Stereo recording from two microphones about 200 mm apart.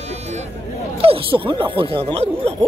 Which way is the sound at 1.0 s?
25° right (ahead or behind).